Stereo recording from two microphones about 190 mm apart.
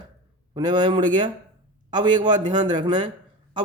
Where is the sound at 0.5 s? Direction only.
25° right (ahead or behind).